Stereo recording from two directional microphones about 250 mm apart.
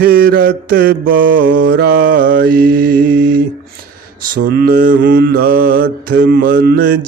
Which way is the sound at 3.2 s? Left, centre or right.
Right.